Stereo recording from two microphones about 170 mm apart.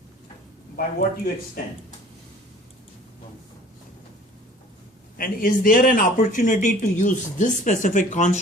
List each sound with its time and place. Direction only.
0.9 s speech: 60° left (ahead or behind)
5.1 s speech: 55° left (ahead or behind)